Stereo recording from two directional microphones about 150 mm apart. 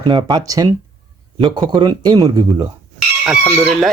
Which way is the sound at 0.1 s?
30° right (ahead or behind).